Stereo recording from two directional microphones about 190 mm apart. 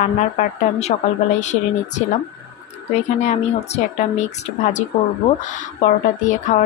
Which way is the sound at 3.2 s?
35° left (ahead or behind).